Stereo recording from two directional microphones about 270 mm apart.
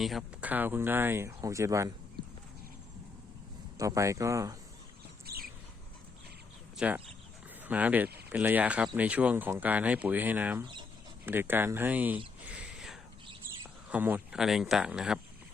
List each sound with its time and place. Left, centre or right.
0.0 s speech: centre
3.8 s speech: centre
5.2 s a sound: right
6.7 s speech: centre
12.5 s a sound: centre
13.9 s speech: centre